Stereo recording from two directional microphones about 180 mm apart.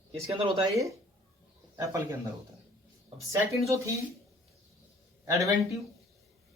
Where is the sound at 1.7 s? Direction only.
15° right (ahead or behind).